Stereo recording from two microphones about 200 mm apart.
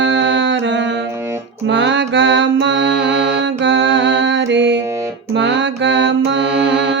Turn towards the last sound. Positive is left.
turn(degrees=-65)  # may be behind; listen again after turning